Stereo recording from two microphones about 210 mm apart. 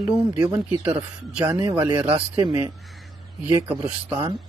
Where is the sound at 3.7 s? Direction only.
5° right (ahead or behind).